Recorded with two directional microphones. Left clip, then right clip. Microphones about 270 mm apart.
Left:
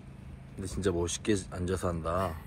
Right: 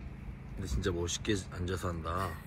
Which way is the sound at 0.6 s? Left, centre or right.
Centre.